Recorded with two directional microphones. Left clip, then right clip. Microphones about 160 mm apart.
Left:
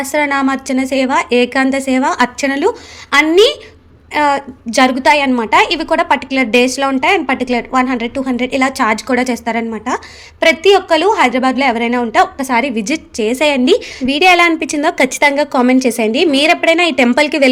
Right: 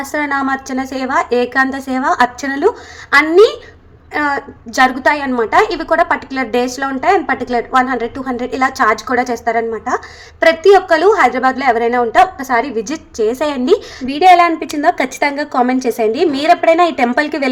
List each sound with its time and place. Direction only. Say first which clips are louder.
0.1 s a woman's voice: left 2 dB; 30° left (ahead or behind)